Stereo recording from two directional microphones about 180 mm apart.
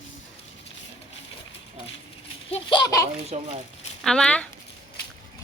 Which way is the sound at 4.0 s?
5° left (ahead or behind).